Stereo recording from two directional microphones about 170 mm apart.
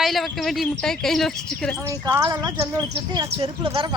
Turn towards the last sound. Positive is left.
turn(degrees=-30)  # may be behind; listen again after turning